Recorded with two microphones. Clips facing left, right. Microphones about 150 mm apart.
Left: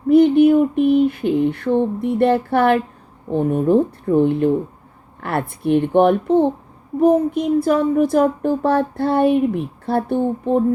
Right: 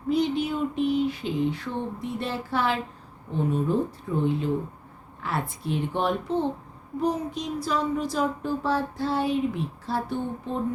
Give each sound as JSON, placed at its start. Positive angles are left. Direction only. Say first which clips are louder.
{"t": 0.1, "sound": "speech", "louder": "left 13 dB", "side_deg": 55}